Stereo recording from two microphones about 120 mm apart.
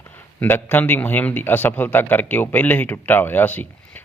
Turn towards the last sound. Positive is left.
turn(degrees=15)  # may be behind; listen again after turning